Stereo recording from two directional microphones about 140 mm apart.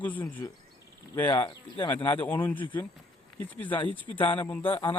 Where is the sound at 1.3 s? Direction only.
35° left (ahead or behind).